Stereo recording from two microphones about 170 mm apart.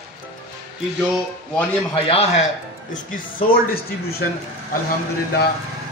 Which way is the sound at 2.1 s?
35° left (ahead or behind).